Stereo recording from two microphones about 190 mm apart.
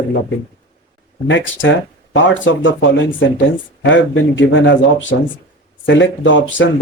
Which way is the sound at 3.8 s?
85° left.